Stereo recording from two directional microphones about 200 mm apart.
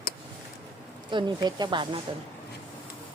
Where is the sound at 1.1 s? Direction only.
25° right (ahead or behind).